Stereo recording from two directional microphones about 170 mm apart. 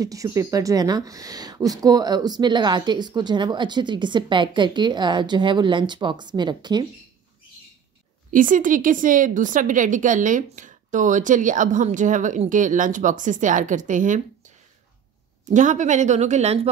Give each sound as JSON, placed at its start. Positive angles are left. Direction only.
{"t": 0.0, "sound": "a woman's voice", "side_deg": -20}
{"t": 8.3, "sound": "a woman's voice", "side_deg": -50}
{"t": 15.4, "sound": "a woman's voice", "side_deg": -45}